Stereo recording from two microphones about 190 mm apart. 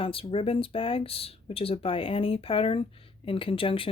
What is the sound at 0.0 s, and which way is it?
A woman's voice, 30° left (ahead or behind).